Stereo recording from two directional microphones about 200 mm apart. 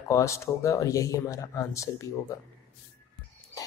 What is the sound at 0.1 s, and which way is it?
Speech, 15° left (ahead or behind).